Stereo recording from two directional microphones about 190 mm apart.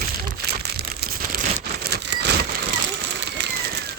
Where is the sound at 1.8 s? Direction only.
60° right (ahead or behind).